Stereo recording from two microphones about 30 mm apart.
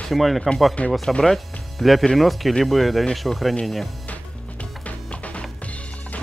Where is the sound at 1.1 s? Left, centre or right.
Left.